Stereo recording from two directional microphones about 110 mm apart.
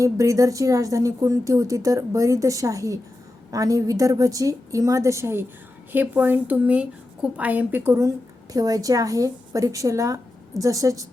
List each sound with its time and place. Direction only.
0.0 s a woman's voice: 30° right (ahead or behind)
8.5 s speech: 35° right (ahead or behind)